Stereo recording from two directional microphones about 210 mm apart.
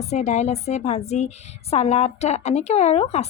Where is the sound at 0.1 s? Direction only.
35° left (ahead or behind).